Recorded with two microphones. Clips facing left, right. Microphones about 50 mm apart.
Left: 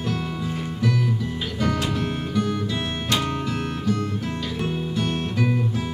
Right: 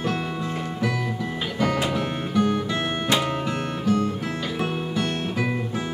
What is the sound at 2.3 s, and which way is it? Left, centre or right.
Music, centre.